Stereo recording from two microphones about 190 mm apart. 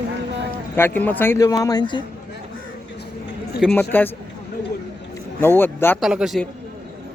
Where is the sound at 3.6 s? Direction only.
5° left (ahead or behind).